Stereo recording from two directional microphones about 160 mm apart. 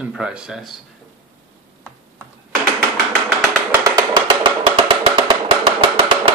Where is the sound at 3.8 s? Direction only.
25° right (ahead or behind).